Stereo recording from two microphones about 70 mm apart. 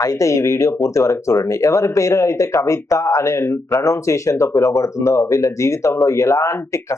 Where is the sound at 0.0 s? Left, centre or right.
Left.